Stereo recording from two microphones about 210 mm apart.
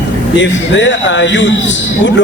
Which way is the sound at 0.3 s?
60° left (ahead or behind).